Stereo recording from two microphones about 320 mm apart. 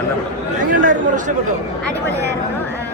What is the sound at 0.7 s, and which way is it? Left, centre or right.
Speech, right.